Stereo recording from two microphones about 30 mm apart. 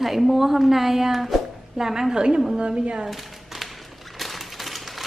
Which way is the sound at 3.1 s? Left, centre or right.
Centre.